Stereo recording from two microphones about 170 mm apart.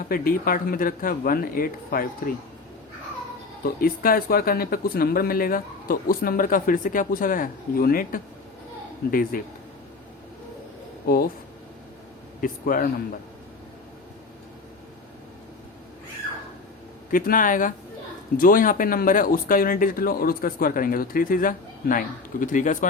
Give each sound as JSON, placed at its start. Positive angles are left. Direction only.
{"t": 0.1, "sound": "speech", "side_deg": 60}
{"t": 3.6, "sound": "speech", "side_deg": 60}
{"t": 11.0, "sound": "speech", "side_deg": 60}
{"t": 12.4, "sound": "speech", "side_deg": 55}
{"t": 17.1, "sound": "speech", "side_deg": 55}